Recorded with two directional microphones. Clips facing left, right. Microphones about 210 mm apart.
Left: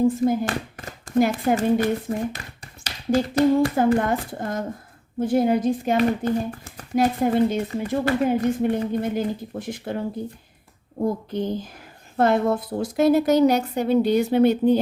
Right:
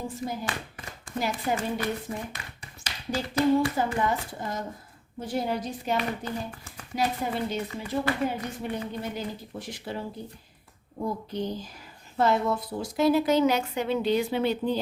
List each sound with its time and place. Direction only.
0.3 s a child's voice: 50° left (ahead or behind)
11.0 s a child's voice: 50° left (ahead or behind)